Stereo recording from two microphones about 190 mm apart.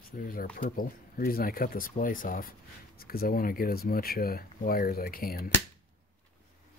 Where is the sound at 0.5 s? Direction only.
50° left (ahead or behind).